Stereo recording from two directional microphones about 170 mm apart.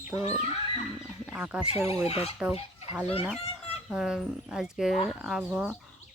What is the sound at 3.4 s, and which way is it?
Chicken, 35° left (ahead or behind).